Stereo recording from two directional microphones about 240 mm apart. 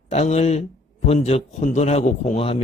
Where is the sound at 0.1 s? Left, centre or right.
Left.